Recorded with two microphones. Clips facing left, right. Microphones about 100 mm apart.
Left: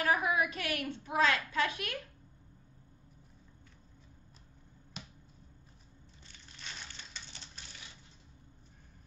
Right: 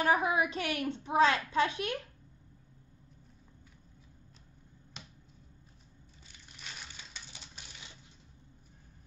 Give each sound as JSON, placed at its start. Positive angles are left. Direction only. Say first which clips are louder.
{"t": 0.0, "sound": "a woman's voice", "louder": "right 2 dB", "side_deg": -25}
{"t": 6.2, "sound": "crushing", "louder": "even", "side_deg": -10}